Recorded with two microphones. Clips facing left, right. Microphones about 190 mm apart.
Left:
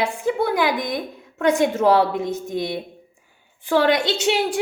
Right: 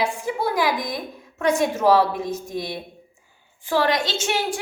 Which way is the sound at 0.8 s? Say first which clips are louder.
Left 3 dB; 20° left (ahead or behind).